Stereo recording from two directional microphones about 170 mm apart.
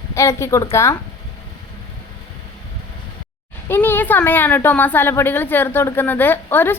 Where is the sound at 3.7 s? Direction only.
10° left (ahead or behind).